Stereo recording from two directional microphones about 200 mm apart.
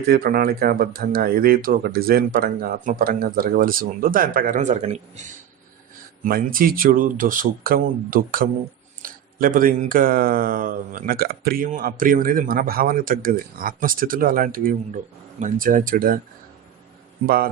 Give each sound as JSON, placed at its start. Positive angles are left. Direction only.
{"t": 0.1, "sound": "speech", "side_deg": -50}
{"t": 6.2, "sound": "speech", "side_deg": -45}
{"t": 17.2, "sound": "speech", "side_deg": -50}